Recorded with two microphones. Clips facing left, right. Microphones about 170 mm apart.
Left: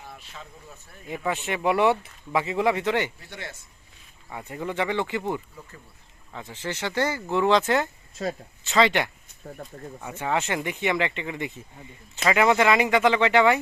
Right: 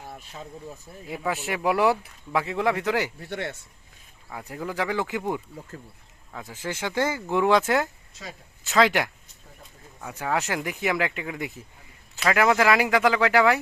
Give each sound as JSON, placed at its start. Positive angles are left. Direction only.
{"t": 1.0, "sound": "speech", "side_deg": 0}
{"t": 3.2, "sound": "speech", "side_deg": -60}
{"t": 4.3, "sound": "speech", "side_deg": 0}
{"t": 8.6, "sound": "speech", "side_deg": 0}